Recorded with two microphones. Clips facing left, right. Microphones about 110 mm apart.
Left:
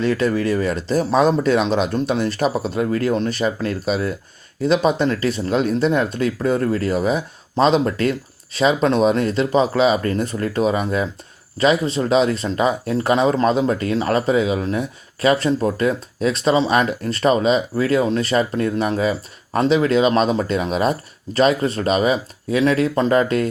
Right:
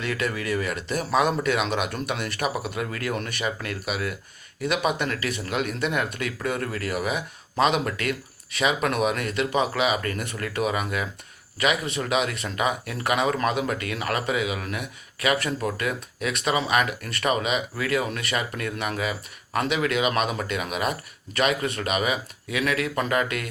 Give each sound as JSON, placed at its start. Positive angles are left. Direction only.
{"t": 0.0, "sound": "speech", "side_deg": 30}